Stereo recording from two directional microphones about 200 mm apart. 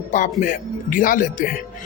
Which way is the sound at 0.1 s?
40° left (ahead or behind).